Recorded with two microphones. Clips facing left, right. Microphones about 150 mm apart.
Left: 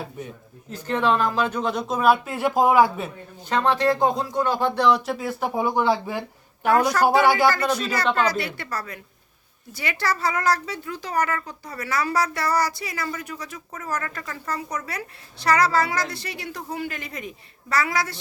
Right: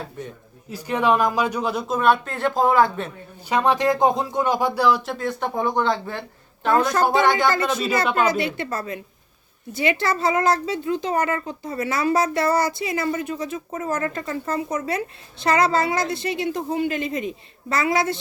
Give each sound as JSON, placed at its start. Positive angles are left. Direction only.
{"t": 0.7, "sound": "speech", "side_deg": -15}
{"t": 3.5, "sound": "speech", "side_deg": -15}
{"t": 7.5, "sound": "speech", "side_deg": -20}